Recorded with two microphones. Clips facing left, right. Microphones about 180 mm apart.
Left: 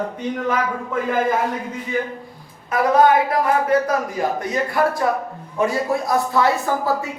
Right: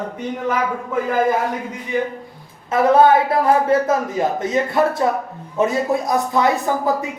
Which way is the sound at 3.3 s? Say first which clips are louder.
Right 2 dB; 25° right (ahead or behind).